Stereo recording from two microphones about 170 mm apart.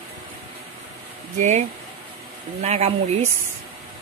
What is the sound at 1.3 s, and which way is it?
Speech, 45° right (ahead or behind).